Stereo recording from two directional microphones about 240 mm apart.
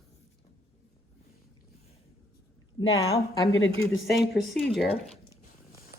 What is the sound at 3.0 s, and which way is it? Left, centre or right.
Speech, left.